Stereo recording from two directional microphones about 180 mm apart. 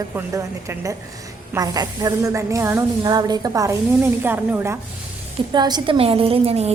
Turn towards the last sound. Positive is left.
turn(degrees=-35)  # may be behind; listen again after turning